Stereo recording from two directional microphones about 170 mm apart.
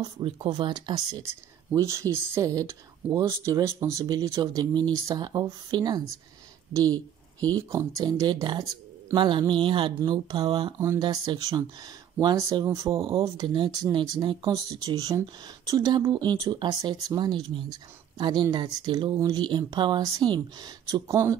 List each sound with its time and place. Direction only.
0.0 s speech: 25° right (ahead or behind)
7.3 s speech: 20° right (ahead or behind)